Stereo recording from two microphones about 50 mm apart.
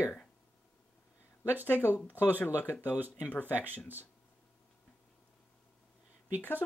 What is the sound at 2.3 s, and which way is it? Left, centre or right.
Speech, left.